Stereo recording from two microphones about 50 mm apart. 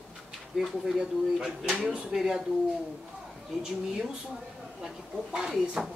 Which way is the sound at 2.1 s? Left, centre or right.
Centre.